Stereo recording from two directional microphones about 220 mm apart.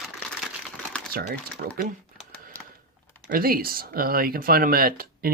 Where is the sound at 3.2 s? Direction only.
40° right (ahead or behind).